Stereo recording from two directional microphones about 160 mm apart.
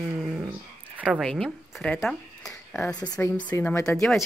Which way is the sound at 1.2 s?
5° left (ahead or behind).